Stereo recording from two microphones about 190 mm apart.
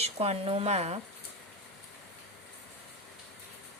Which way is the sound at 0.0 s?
30° right (ahead or behind).